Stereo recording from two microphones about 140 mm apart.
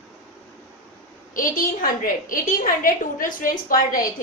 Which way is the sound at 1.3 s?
75° left (ahead or behind).